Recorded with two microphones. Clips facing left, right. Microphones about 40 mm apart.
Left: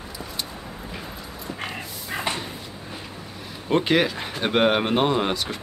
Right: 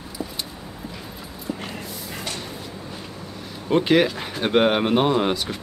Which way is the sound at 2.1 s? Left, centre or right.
Left.